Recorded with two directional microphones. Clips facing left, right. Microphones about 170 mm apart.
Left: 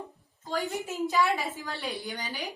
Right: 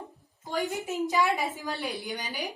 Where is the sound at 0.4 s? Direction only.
20° right (ahead or behind).